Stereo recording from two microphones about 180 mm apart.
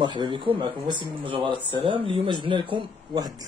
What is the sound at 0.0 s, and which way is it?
Speech, 25° right (ahead or behind).